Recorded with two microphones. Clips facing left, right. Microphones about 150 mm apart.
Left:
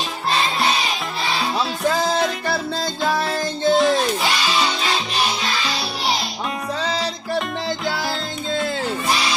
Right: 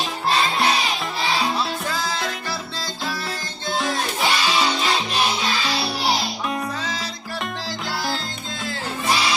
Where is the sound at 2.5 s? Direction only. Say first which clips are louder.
Left 7 dB; 55° left (ahead or behind).